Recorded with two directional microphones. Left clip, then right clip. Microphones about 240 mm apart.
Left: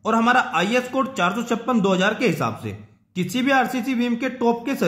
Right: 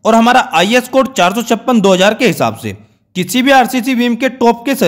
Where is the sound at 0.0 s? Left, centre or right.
Right.